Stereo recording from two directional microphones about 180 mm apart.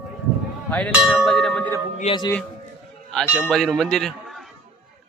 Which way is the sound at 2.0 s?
25° left (ahead or behind).